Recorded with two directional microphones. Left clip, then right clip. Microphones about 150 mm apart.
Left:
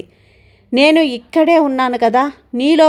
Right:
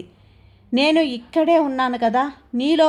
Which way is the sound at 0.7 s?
50° left (ahead or behind).